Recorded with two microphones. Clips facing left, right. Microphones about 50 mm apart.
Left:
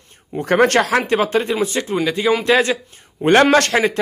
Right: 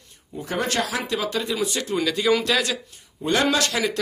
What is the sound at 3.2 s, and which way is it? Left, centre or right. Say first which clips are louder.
Speech: left 9 dB; left.